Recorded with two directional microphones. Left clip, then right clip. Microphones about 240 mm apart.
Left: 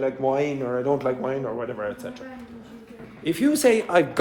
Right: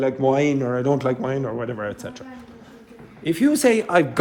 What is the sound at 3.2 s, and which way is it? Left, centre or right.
Speech, right.